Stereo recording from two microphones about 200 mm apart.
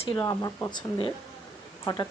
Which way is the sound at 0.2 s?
15° left (ahead or behind).